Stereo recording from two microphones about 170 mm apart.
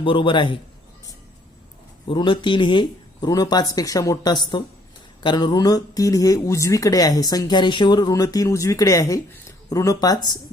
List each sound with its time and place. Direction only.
0.0 s speech: 30° left (ahead or behind)
2.0 s speech: 30° left (ahead or behind)